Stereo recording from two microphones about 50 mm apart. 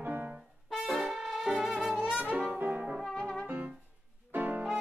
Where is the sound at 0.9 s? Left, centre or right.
Centre.